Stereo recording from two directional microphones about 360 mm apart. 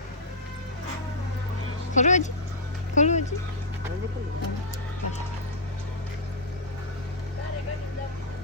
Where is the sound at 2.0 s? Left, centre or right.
Centre.